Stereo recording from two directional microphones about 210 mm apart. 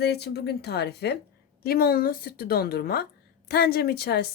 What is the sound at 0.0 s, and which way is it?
A woman's voice, 50° left (ahead or behind).